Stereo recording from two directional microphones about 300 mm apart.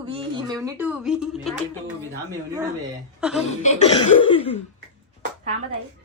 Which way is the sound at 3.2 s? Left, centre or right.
Centre.